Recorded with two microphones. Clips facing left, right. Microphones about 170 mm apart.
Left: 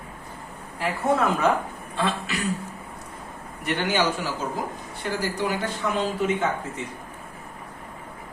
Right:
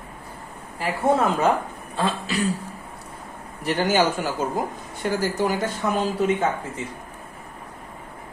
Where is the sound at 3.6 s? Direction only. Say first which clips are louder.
Right 4 dB; 40° right (ahead or behind).